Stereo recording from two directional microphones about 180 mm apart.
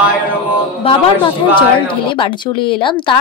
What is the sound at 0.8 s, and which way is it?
A man's voice, 30° left (ahead or behind).